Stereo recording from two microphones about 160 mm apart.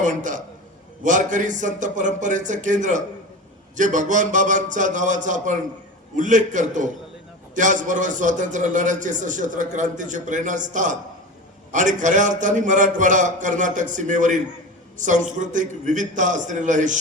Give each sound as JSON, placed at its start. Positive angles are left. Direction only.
{"t": 0.0, "sound": "a man's voice", "side_deg": -50}